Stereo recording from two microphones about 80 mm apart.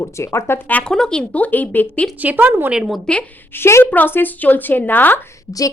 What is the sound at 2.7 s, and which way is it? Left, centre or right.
Speech, centre.